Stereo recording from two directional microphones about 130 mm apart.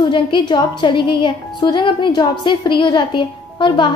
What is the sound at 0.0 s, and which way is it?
A woman's voice, 35° left (ahead or behind).